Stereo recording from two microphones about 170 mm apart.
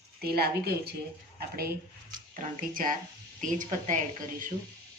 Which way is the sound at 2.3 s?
50° right (ahead or behind).